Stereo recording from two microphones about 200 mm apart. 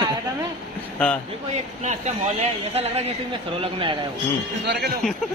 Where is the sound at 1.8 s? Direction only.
35° right (ahead or behind).